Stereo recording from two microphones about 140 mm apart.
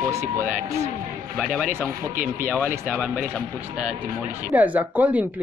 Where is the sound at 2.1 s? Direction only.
75° right (ahead or behind).